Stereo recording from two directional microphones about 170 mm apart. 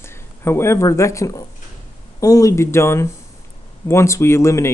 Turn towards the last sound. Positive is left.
turn(degrees=15)  # may be behind; listen again after turning